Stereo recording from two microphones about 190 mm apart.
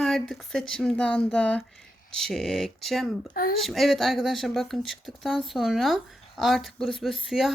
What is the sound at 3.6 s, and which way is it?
Speech, centre (ahead or behind).